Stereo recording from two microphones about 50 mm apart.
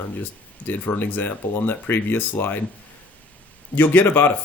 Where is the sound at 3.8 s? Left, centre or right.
Left.